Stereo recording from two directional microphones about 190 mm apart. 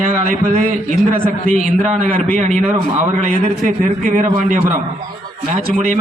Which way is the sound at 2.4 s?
35° right (ahead or behind).